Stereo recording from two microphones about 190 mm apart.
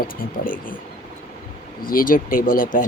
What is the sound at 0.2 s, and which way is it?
Speech, 45° left (ahead or behind).